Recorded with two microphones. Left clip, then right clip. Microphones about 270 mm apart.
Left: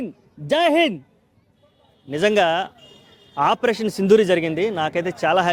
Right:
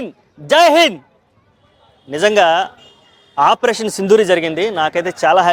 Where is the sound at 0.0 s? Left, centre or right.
Right.